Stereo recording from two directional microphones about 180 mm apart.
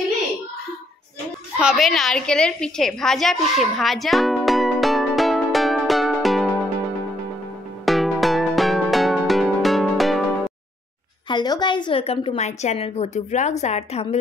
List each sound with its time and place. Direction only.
1.6 s a sound: centre (ahead or behind)
7.8 s music: centre (ahead or behind)
11.2 s a woman's voice: 25° left (ahead or behind); by 14.0 s 40° left (ahead or behind)